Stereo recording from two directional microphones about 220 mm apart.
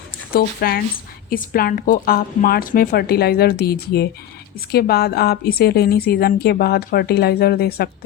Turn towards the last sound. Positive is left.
turn(degrees=45)  # may be behind; listen again after turning